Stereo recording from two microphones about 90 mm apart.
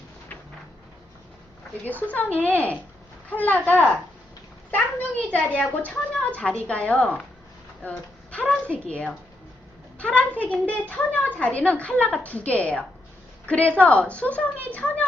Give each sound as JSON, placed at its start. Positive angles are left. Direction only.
{"t": 1.8, "sound": "a woman's voice", "side_deg": 20}
{"t": 5.3, "sound": "a woman's voice", "side_deg": 15}